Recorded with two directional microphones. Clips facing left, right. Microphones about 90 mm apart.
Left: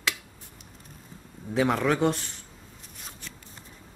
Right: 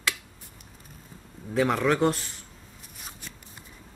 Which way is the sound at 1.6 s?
Centre (ahead or behind).